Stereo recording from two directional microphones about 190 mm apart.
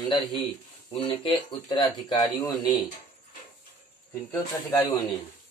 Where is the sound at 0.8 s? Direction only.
30° left (ahead or behind).